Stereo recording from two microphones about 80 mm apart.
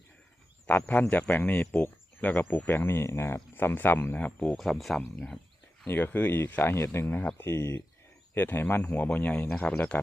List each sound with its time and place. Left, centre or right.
0.9 s speech: centre
4.4 s speech: centre
5.9 s speech: left